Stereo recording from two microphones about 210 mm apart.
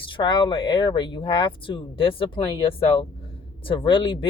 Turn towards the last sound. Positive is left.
turn(degrees=25)  # may be behind; listen again after turning